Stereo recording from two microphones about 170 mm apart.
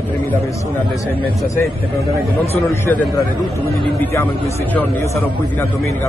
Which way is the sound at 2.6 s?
15° left (ahead or behind).